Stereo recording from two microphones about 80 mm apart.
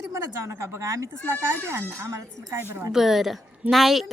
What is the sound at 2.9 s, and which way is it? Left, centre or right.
A woman's voice, centre.